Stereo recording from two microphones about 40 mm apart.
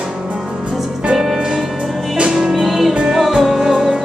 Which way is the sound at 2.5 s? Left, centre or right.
Centre.